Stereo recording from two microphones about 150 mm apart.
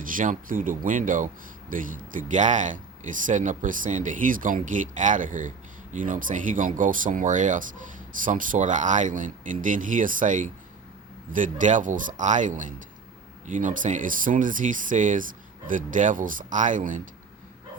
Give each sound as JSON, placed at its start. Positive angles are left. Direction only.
{"t": 0.0, "sound": "speech", "side_deg": -65}